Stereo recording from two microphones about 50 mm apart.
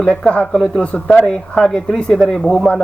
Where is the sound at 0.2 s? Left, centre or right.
Centre.